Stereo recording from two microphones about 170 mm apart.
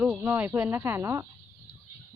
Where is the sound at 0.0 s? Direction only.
10° right (ahead or behind).